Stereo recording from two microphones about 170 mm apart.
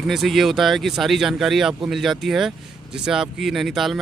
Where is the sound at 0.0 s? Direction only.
Centre (ahead or behind).